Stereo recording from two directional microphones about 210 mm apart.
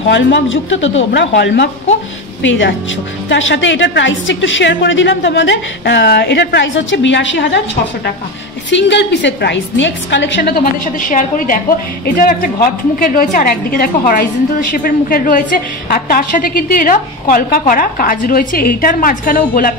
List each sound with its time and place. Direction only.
0.1 s a woman's voice: 60° left (ahead or behind)
3.3 s a woman's voice: 60° left (ahead or behind); by 19.7 s 40° left (ahead or behind)